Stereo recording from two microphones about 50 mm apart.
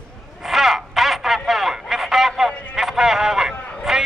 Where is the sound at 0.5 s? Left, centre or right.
Centre.